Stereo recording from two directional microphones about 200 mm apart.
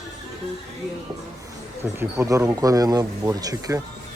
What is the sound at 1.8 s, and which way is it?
Speech, 10° right (ahead or behind).